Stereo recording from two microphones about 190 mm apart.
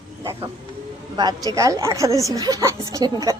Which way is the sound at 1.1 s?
20° right (ahead or behind).